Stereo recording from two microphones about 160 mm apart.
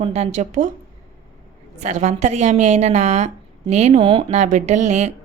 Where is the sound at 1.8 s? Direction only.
45° right (ahead or behind).